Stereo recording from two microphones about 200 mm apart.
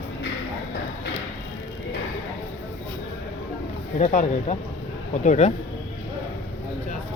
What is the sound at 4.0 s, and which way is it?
Speech, 35° left (ahead or behind).